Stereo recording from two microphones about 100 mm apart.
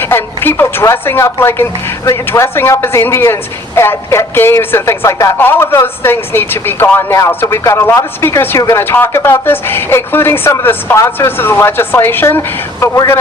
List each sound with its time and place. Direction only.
0.0 s speech: 25° left (ahead or behind)